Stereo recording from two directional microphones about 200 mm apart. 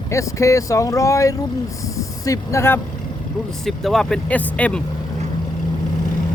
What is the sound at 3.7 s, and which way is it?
Speech, centre (ahead or behind).